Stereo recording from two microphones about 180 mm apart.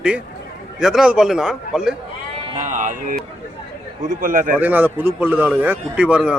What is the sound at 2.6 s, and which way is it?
Speech, 45° right (ahead or behind).